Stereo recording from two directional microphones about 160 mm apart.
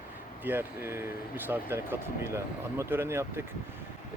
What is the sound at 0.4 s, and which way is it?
Speech, 15° right (ahead or behind).